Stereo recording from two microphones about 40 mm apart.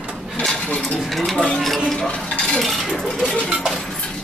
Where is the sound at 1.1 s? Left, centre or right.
Centre.